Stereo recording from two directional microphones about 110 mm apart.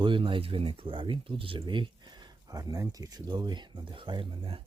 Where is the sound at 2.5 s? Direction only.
30° right (ahead or behind); by 4.6 s 50° right (ahead or behind).